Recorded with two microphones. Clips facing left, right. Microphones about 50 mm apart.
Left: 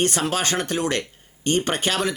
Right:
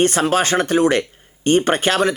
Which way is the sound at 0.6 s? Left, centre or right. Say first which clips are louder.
Right 9 dB; centre.